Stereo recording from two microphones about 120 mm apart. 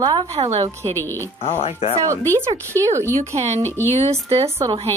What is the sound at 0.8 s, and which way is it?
Speech, 50° right (ahead or behind).